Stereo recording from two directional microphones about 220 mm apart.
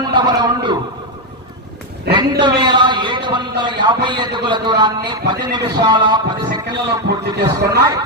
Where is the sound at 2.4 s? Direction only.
20° right (ahead or behind).